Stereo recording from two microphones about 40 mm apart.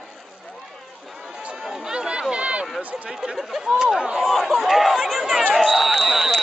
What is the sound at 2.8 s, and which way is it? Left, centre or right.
Speech, right.